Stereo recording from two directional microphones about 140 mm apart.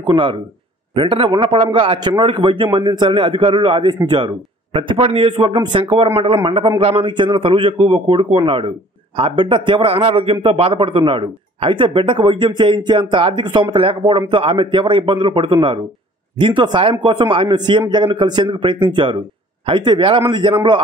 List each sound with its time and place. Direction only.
0.0 s a man's voice: 35° right (ahead or behind)